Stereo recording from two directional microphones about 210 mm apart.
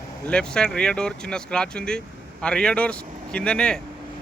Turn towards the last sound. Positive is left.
turn(degrees=5)  # may be behind; listen again after turning